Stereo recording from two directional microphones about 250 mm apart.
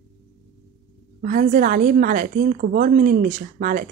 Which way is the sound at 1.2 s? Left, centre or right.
Right.